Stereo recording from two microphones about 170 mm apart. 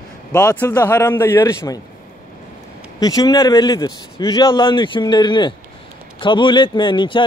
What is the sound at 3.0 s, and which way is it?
A man's voice, 20° left (ahead or behind).